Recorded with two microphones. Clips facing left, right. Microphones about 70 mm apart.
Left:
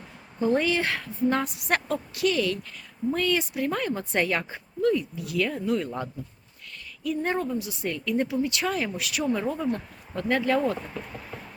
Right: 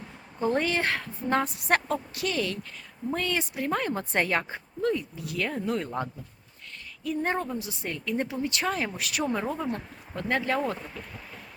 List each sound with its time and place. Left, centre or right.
0.3 s speech: right
7.0 s speech: right
9.2 s speech: right